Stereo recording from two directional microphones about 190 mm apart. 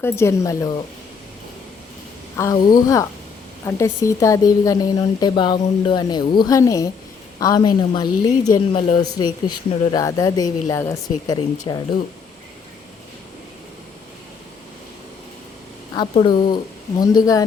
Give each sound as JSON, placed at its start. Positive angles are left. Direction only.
{"t": 0.0, "sound": "speech", "side_deg": 15}
{"t": 2.3, "sound": "speech", "side_deg": 15}
{"t": 16.0, "sound": "speech", "side_deg": 25}